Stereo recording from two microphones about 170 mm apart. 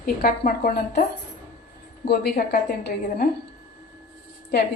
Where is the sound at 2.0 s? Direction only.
70° left (ahead or behind).